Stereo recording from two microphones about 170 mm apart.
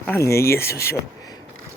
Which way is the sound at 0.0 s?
15° left (ahead or behind).